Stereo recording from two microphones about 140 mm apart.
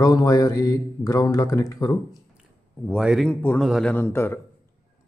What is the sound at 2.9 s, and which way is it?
Speech, centre (ahead or behind).